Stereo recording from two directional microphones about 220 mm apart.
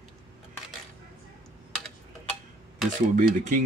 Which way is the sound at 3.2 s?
35° right (ahead or behind).